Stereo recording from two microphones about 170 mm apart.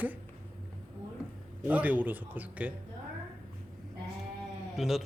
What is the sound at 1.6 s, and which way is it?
Speech, 10° right (ahead or behind).